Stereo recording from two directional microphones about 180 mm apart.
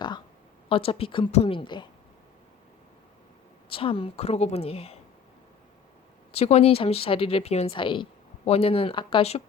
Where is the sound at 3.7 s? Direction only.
30° left (ahead or behind).